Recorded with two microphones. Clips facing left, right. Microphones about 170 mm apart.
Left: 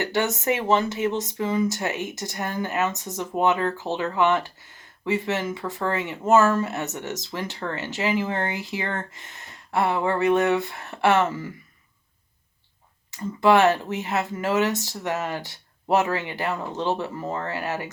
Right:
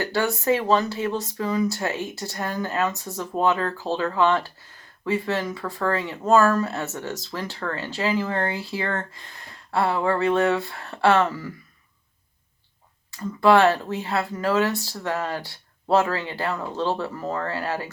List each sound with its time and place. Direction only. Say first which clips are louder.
0.0 s speech: even; 20° left (ahead or behind)
13.1 s speech: right 1 dB; 15° left (ahead or behind)